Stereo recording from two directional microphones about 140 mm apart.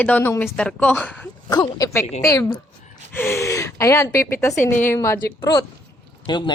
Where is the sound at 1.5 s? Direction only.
30° left (ahead or behind).